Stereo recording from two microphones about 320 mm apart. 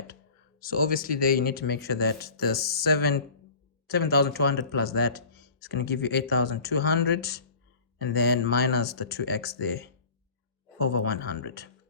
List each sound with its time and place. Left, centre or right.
0.6 s speech: left
11.0 s speech: left